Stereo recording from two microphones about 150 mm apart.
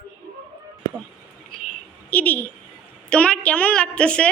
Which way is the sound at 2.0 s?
10° left (ahead or behind).